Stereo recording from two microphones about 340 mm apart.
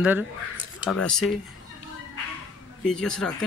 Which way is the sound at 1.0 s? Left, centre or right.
Centre.